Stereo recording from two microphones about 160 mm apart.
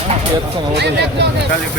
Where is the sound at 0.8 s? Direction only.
90° right.